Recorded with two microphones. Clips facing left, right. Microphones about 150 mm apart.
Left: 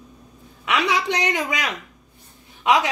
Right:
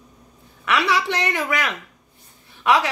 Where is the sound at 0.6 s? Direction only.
15° left (ahead or behind).